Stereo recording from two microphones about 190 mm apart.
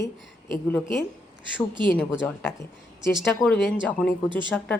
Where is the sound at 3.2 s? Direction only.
Centre (ahead or behind).